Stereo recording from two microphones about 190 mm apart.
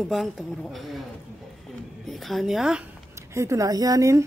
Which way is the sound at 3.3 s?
15° right (ahead or behind).